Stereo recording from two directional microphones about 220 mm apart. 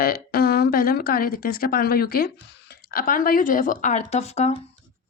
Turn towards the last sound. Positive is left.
turn(degrees=30)  # may be behind; listen again after turning